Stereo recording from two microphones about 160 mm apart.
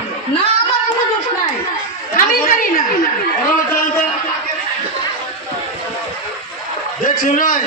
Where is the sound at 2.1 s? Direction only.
60° left (ahead or behind).